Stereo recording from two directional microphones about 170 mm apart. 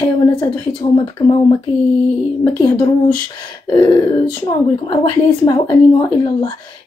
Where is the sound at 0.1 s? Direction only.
30° left (ahead or behind).